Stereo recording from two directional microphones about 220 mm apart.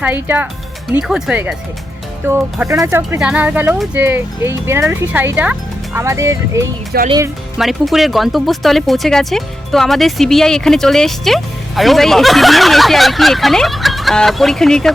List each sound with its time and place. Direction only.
0.0 s speech: 10° right (ahead or behind)
6.9 s speech: 45° right (ahead or behind)
7.6 s speech: centre (ahead or behind)